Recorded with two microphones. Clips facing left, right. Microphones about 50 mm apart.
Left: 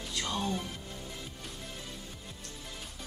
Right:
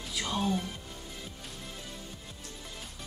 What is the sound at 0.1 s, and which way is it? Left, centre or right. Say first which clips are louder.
Music: right 3 dB; centre.